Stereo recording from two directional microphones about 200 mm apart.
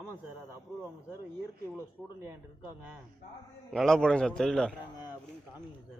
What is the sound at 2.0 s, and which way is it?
Speech, 5° right (ahead or behind).